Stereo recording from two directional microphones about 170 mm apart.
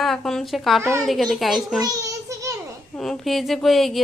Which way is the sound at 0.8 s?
15° right (ahead or behind).